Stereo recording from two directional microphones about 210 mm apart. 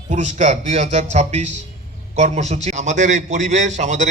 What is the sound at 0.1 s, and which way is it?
A man's voice, 35° right (ahead or behind).